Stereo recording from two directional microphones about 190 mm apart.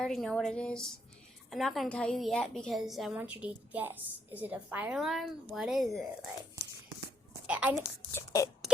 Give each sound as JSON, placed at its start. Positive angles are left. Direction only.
{"t": 0.0, "sound": "a woman's voice", "side_deg": 0}
{"t": 7.4, "sound": "a woman's voice", "side_deg": -10}
{"t": 8.1, "sound": "a sound", "side_deg": 15}